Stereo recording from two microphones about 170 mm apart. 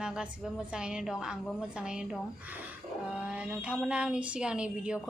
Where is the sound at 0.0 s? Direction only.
5° right (ahead or behind).